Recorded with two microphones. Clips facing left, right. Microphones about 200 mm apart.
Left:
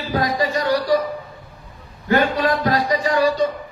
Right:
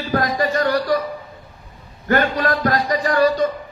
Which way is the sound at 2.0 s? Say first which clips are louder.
Left 1 dB; 50° right (ahead or behind).